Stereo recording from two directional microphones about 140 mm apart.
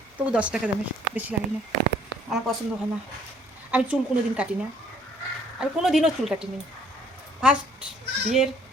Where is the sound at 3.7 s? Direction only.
10° right (ahead or behind).